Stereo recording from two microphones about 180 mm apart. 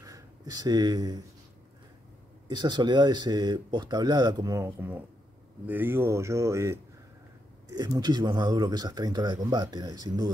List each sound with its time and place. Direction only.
0.0 s speech: 20° right (ahead or behind)
2.4 s speech: 25° right (ahead or behind)